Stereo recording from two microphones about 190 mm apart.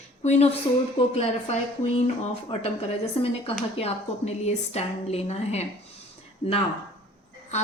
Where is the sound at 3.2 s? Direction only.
30° left (ahead or behind).